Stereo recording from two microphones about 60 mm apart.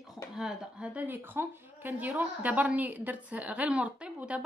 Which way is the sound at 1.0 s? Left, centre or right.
Right.